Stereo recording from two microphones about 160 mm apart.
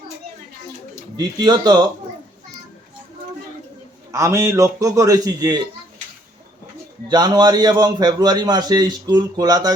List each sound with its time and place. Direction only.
1.1 s a man's voice: 25° right (ahead or behind)
4.1 s a man's voice: 20° right (ahead or behind)
7.1 s a man's voice: 25° right (ahead or behind)